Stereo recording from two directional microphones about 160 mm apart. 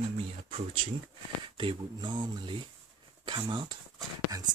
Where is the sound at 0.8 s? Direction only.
35° right (ahead or behind).